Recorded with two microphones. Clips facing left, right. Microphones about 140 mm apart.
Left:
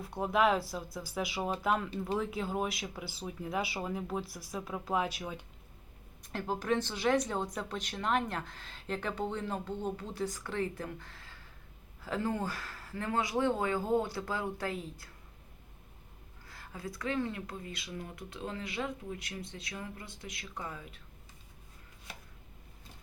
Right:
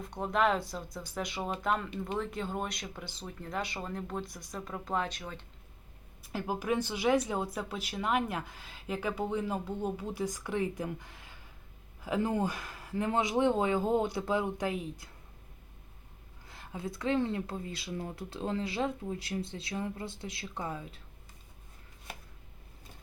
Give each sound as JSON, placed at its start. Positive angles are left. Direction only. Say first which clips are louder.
{"t": 0.0, "sound": "speech", "louder": "left 1 dB", "side_deg": 5}
{"t": 6.2, "sound": "speech", "louder": "even", "side_deg": -5}
{"t": 16.5, "sound": "speech", "louder": "right 3 dB", "side_deg": -20}